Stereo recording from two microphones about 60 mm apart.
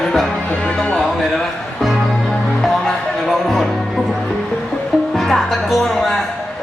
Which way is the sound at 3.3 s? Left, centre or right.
Centre.